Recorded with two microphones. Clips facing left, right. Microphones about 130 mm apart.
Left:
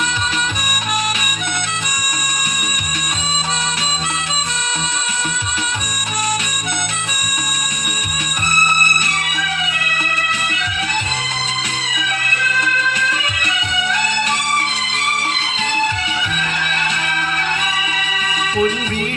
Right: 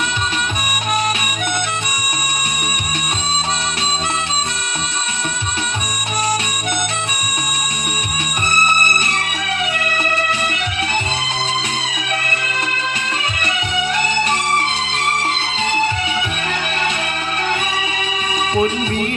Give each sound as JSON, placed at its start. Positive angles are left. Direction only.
{"t": 12.5, "sound": "music", "side_deg": -30}
{"t": 18.5, "sound": "music", "side_deg": -30}